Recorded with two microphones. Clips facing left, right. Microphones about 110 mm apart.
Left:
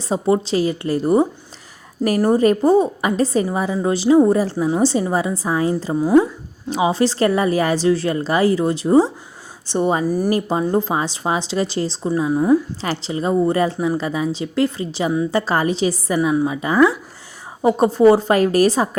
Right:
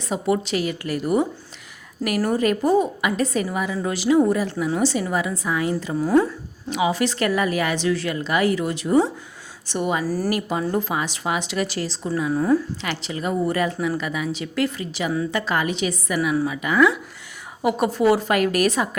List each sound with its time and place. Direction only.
0.0 s a woman's voice: 30° left (ahead or behind)
6.0 s speech: 15° left (ahead or behind)
6.7 s a woman's voice: 30° left (ahead or behind)
10.0 s speech: 20° left (ahead or behind)
12.8 s a woman's voice: 35° left (ahead or behind)